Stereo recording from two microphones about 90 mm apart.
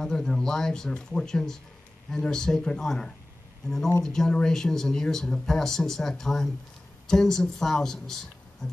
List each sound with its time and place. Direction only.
0.0 s speech: 5° left (ahead or behind)